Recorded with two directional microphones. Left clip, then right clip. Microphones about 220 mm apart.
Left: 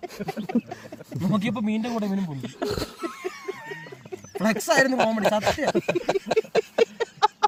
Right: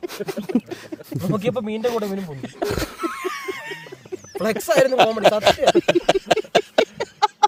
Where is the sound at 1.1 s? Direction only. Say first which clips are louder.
Right 4 dB; 15° right (ahead or behind).